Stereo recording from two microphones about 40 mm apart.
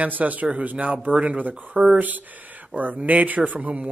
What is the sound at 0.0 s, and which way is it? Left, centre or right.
Speech, right.